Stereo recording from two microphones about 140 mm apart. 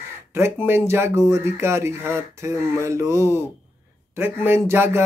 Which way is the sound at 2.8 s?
20° right (ahead or behind).